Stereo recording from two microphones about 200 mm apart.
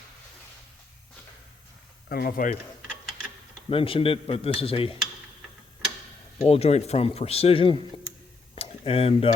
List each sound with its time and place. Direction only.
2.0 s speech: 50° left (ahead or behind)
3.7 s a man's voice: 25° left (ahead or behind)
6.4 s speech: 30° left (ahead or behind)
8.5 s a sound: 30° left (ahead or behind)